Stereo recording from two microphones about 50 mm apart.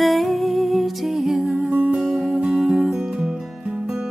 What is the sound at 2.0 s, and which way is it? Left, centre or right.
Music, centre.